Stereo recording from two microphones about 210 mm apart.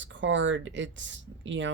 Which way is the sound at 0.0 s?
60° right (ahead or behind).